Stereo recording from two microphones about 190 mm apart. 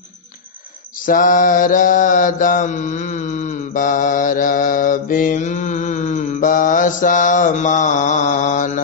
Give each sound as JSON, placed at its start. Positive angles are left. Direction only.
{"t": 1.0, "sound": "mantra", "side_deg": 45}